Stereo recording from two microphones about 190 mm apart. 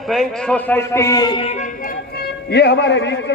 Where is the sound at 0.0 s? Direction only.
Centre (ahead or behind).